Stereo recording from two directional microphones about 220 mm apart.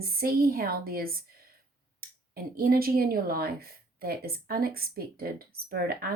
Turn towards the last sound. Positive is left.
turn(degrees=-45)  # may be behind; listen again after turning